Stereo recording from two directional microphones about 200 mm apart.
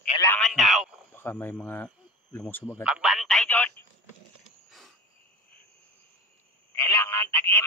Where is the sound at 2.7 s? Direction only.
5° right (ahead or behind).